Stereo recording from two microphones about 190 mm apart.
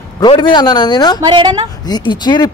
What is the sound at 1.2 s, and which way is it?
Speech, 20° right (ahead or behind).